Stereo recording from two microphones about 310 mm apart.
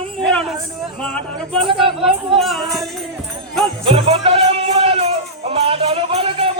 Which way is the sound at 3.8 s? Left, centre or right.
Centre.